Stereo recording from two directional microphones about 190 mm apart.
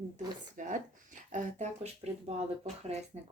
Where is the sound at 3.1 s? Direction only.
35° right (ahead or behind).